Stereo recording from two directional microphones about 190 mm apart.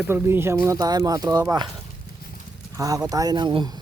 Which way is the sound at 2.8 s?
20° right (ahead or behind).